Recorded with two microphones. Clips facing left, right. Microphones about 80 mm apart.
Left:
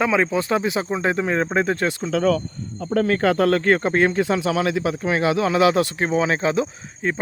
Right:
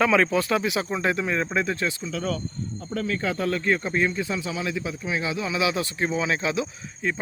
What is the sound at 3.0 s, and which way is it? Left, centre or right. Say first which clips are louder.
Speech: left 8 dB; left.